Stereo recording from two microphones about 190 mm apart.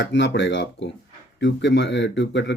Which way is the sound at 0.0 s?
70° left (ahead or behind).